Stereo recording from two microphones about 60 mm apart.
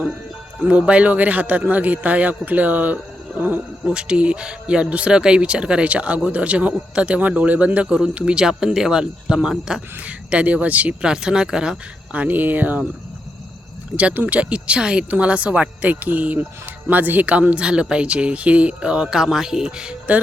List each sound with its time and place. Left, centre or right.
0.6 s speech: right
3.9 s speech: centre
10.0 s speech: right
12.1 s speech: right
13.9 s speech: right